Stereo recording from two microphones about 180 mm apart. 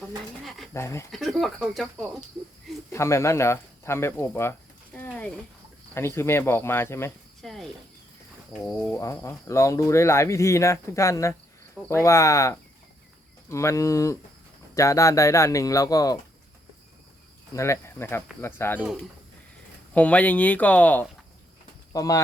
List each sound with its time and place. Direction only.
0.4 s speech: centre (ahead or behind)
0.7 s speech: 15° left (ahead or behind)
1.1 s speech: centre (ahead or behind)
2.9 s speech: 15° left (ahead or behind)
4.9 s a sound: 5° left (ahead or behind)
5.9 s speech: 15° left (ahead or behind)
7.4 s speech: centre (ahead or behind)
9.0 s speech: 15° left (ahead or behind)
17.5 s speech: 15° left (ahead or behind)
19.9 s speech: 5° left (ahead or behind)